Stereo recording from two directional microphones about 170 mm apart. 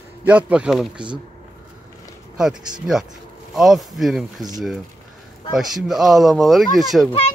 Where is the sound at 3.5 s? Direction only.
Centre (ahead or behind).